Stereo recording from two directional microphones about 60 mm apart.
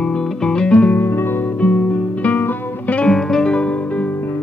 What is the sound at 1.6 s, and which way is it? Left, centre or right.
Music, left.